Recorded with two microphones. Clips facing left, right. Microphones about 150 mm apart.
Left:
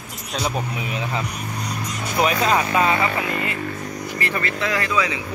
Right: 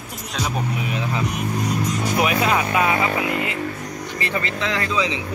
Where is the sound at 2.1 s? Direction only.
5° right (ahead or behind).